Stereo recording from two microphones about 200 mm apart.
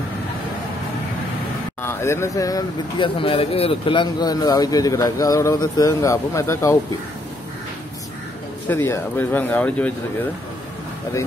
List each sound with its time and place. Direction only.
1.8 s speech: 10° left (ahead or behind)
8.6 s speech: 10° left (ahead or behind)